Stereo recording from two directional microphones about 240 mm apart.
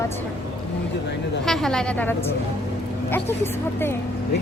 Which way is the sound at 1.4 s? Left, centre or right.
Centre.